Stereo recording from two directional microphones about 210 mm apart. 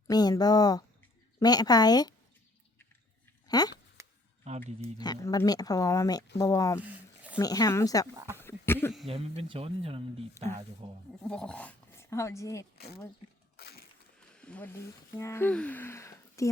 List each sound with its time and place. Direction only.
0.1 s speech: 20° left (ahead or behind)
3.4 s dog: 20° left (ahead or behind)
4.0 s camera: 15° right (ahead or behind)
4.4 s speech: 35° right (ahead or behind)
4.9 s speech: 20° left (ahead or behind)
6.8 s a sound: 5° right (ahead or behind)
7.3 s speech: 15° left (ahead or behind)
8.4 s a sound: 10° left (ahead or behind)
9.0 s speech: 25° right (ahead or behind)
11.2 s speech: 5° left (ahead or behind)
12.7 s speech: 50° left (ahead or behind)
13.6 s a sound: 50° left (ahead or behind)
14.2 s speech: 5° left (ahead or behind)